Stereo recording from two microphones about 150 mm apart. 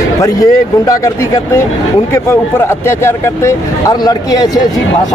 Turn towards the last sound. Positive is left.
turn(degrees=25)  # may be behind; listen again after turning